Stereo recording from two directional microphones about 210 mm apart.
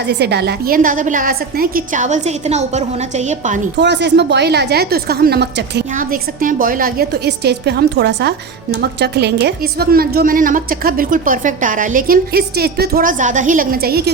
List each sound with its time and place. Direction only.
0.0 s a woman's voice: 55° right (ahead or behind); by 3.6 s 35° right (ahead or behind)
3.8 s a woman's voice: 55° right (ahead or behind)
5.9 s a woman's voice: 40° right (ahead or behind)